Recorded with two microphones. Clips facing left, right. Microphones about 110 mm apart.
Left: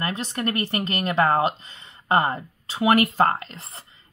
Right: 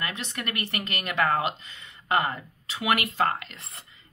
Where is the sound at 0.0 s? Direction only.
35° left (ahead or behind).